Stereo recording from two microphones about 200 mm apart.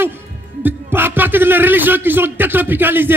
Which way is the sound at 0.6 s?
10° right (ahead or behind).